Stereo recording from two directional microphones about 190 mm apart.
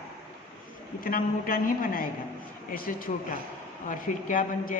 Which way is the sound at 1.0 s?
50° left (ahead or behind).